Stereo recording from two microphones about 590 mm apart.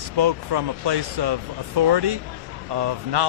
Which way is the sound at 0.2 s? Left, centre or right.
Right.